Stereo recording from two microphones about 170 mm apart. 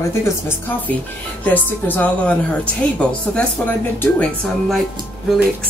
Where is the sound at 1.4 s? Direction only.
10° left (ahead or behind).